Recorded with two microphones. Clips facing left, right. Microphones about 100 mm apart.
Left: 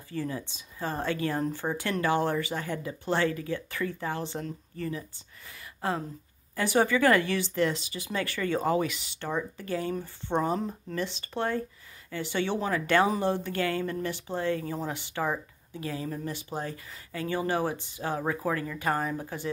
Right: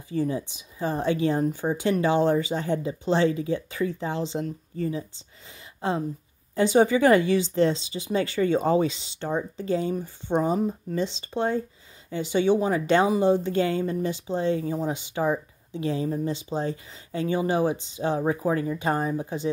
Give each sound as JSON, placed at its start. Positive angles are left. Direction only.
{"t": 0.1, "sound": "speech", "side_deg": -20}